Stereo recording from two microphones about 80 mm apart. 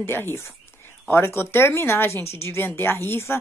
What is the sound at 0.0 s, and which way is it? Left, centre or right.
Speech, left.